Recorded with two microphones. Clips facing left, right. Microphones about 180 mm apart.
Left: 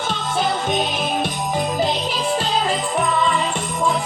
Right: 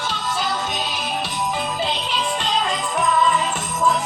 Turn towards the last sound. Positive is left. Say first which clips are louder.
# even
turn(degrees=30)  # may be behind; listen again after turning